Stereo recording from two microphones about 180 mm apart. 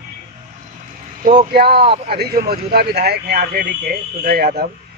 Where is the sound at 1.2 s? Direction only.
45° right (ahead or behind).